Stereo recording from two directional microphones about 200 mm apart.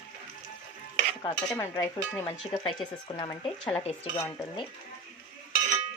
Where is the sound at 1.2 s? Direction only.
25° left (ahead or behind).